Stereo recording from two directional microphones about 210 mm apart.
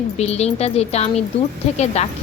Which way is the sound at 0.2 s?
30° left (ahead or behind).